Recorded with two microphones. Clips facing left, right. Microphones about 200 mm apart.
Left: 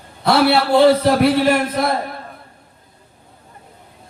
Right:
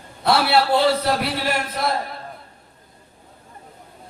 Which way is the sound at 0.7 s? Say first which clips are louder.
Left 7 dB; 50° left (ahead or behind).